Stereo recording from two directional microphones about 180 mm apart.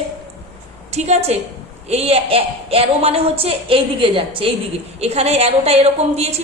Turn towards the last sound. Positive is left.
turn(degrees=-35)  # may be behind; listen again after turning